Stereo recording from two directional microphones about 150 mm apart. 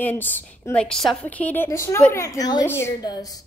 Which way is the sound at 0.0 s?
10° left (ahead or behind).